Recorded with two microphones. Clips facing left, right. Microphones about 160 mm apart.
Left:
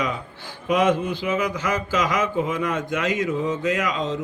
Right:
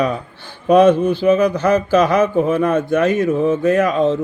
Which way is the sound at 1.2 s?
40° right (ahead or behind).